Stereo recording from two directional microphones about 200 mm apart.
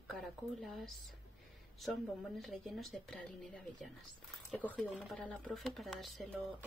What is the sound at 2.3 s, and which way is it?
Speech, centre (ahead or behind).